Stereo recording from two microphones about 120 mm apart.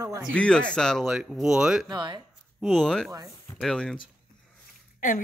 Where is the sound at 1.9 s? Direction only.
40° right (ahead or behind).